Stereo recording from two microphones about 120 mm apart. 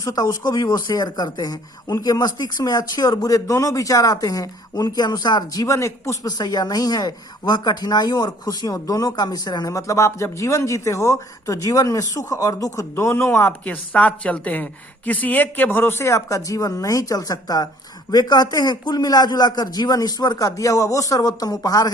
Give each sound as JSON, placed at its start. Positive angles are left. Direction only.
{"t": 0.0, "sound": "speech", "side_deg": 30}
{"t": 6.3, "sound": "speech", "side_deg": 35}
{"t": 13.7, "sound": "speech", "side_deg": 10}